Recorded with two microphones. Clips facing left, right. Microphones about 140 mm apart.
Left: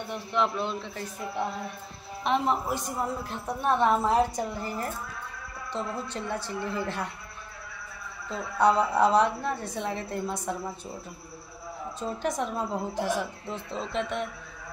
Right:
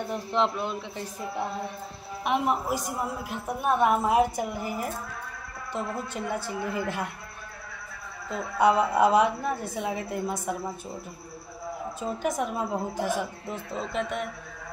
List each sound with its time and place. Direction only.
0.1 s a man's voice: 30° right (ahead or behind)
0.6 s a woman's voice: 10° right (ahead or behind)
8.5 s a woman's voice: 10° right (ahead or behind)
12.0 s a woman's voice: 5° right (ahead or behind)